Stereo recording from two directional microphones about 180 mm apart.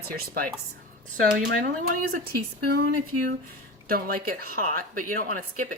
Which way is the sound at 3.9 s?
55° right (ahead or behind).